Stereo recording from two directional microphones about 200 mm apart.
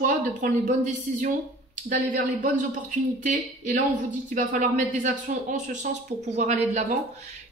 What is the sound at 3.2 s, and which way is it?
Speech, 40° right (ahead or behind).